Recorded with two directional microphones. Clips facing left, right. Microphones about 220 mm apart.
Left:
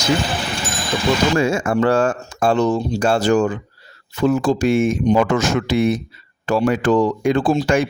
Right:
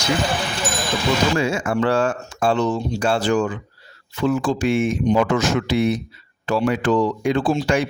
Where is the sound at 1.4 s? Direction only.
45° left (ahead or behind).